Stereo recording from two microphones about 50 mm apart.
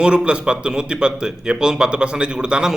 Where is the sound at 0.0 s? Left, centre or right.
Centre.